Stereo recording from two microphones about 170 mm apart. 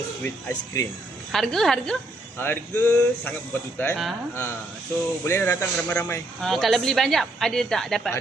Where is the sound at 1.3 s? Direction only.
Centre (ahead or behind).